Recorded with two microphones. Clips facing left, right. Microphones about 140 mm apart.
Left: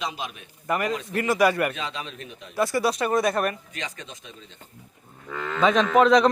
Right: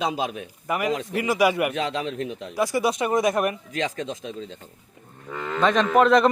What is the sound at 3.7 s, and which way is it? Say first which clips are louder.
Speech: right 9 dB; 90° right.